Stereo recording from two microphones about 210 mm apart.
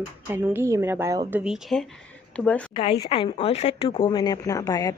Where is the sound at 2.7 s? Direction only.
25° left (ahead or behind).